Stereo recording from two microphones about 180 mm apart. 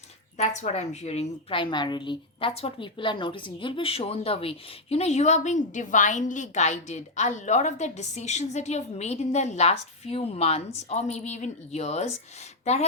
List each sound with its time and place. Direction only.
0.3 s a woman's voice: 40° left (ahead or behind)